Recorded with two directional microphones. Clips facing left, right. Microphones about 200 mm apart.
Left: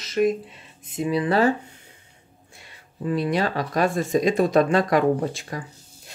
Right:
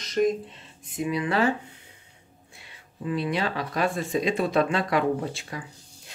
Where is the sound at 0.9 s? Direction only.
35° left (ahead or behind).